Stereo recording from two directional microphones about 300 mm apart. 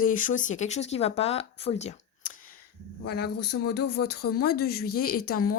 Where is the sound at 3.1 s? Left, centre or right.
Left.